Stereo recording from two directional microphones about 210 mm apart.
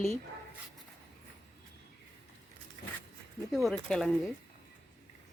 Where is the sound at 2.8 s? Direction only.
45° left (ahead or behind).